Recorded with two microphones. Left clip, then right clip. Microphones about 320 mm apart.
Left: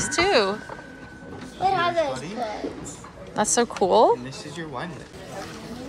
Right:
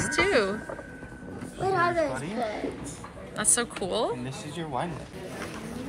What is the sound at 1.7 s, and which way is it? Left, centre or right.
Speech, centre.